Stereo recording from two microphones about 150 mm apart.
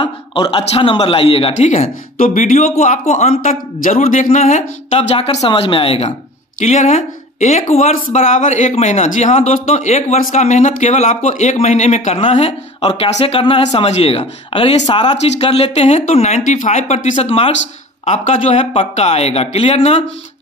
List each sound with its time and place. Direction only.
0.0 s speech: 35° left (ahead or behind); by 4.6 s 60° left (ahead or behind)
4.9 s speech: 40° left (ahead or behind)